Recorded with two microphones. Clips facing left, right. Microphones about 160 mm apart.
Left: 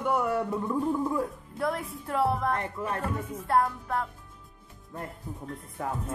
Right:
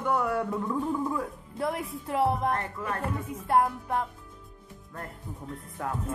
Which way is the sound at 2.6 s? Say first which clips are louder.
Left 1 dB; 20° left (ahead or behind).